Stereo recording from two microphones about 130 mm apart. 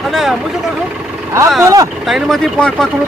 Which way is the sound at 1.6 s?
25° right (ahead or behind).